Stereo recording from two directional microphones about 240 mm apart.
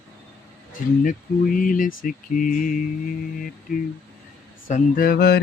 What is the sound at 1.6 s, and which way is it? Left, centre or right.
Mantra, left.